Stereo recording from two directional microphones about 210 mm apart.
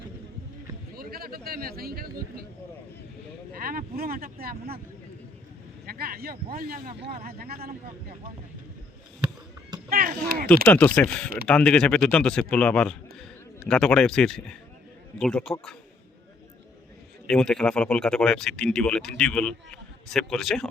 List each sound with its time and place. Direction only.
0.9 s speech: 45° right (ahead or behind)
3.5 s speech: 45° right (ahead or behind)
5.8 s speech: 45° right (ahead or behind)
9.9 s speech: 45° right (ahead or behind)
10.7 s speech: 5° left (ahead or behind)
17.2 s speech: 5° left (ahead or behind)